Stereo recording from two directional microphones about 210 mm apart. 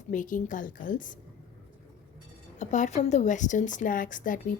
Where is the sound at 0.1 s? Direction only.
40° left (ahead or behind).